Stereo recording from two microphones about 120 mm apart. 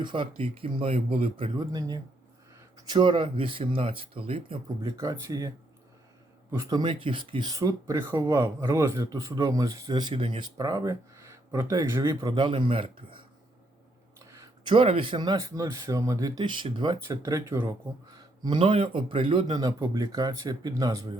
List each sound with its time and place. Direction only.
0.0 s speech: 45° right (ahead or behind)
1.5 s speech: 30° right (ahead or behind)
6.5 s speech: 30° right (ahead or behind); by 13.2 s 45° right (ahead or behind)
14.6 s speech: 45° right (ahead or behind)
19.5 s speech: 30° right (ahead or behind)